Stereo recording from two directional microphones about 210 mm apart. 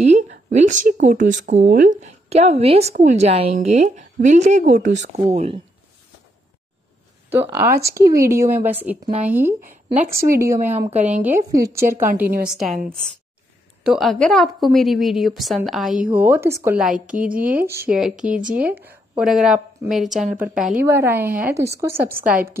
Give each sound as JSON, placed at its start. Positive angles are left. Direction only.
{"t": 0.0, "sound": "speech", "side_deg": -35}
{"t": 7.2, "sound": "speech", "side_deg": -10}
{"t": 8.0, "sound": "speech", "side_deg": -45}
{"t": 8.3, "sound": "speech", "side_deg": -10}
{"t": 10.1, "sound": "speech", "side_deg": -40}
{"t": 10.4, "sound": "a woman's voice", "side_deg": -15}
{"t": 17.1, "sound": "speech", "side_deg": -40}
{"t": 17.4, "sound": "a woman's voice", "side_deg": -5}